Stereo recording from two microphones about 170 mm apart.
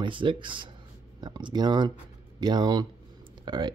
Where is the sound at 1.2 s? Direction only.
25° right (ahead or behind).